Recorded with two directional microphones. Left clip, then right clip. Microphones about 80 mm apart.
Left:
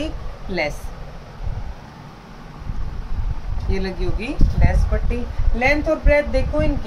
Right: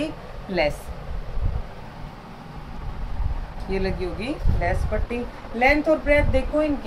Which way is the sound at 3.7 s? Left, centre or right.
Left.